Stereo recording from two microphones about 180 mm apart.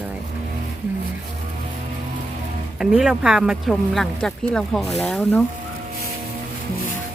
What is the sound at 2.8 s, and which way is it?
Speech, 5° right (ahead or behind).